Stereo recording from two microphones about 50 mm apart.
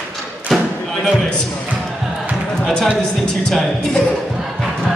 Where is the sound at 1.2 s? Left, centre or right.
Centre.